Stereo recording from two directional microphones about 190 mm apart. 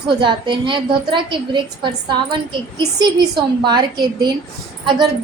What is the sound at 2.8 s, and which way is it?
A woman's voice, 25° right (ahead or behind).